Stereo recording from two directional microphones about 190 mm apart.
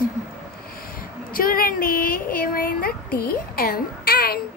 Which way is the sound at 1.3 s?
50° left (ahead or behind).